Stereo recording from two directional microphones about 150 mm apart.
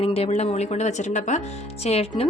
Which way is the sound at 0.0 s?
40° left (ahead or behind).